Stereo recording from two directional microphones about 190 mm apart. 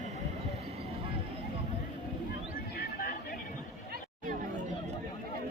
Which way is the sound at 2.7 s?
50° left (ahead or behind).